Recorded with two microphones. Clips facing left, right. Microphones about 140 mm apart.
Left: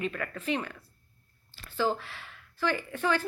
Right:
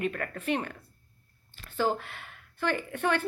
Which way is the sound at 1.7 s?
45° right (ahead or behind).